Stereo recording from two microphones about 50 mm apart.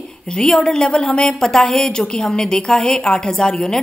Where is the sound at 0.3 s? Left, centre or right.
Centre.